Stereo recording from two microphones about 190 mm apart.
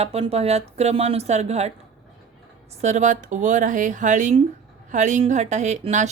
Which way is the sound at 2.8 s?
40° right (ahead or behind).